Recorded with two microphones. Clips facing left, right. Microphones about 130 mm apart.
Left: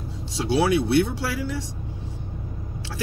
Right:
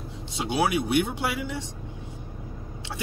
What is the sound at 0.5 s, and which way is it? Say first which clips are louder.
Speech: left 4 dB; 15° right (ahead or behind).